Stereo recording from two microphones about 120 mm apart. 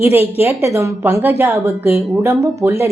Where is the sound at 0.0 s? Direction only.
15° right (ahead or behind).